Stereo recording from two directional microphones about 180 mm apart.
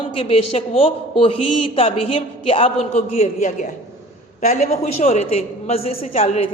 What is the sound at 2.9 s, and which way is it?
A man's voice, 40° left (ahead or behind).